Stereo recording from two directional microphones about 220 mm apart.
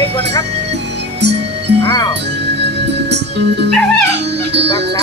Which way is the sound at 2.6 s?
50° right (ahead or behind).